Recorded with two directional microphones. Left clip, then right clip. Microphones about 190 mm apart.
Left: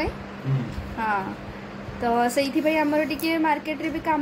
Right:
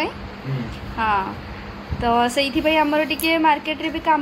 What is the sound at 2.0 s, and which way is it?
A woman's voice, centre (ahead or behind).